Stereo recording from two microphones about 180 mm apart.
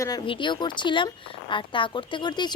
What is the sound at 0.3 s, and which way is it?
Speech, 25° left (ahead or behind).